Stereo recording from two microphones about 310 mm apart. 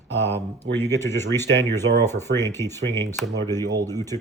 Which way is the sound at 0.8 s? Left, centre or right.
Centre.